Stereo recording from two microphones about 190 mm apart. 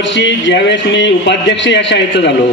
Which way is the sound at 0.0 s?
70° left (ahead or behind).